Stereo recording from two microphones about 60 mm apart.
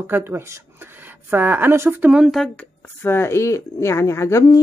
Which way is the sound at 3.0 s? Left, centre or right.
Left.